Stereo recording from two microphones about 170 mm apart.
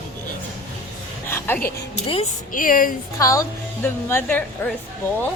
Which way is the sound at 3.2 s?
20° left (ahead or behind).